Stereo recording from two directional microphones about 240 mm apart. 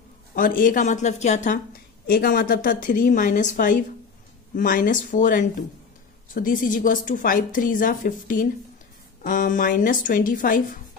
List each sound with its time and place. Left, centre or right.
0.3 s a woman's voice: left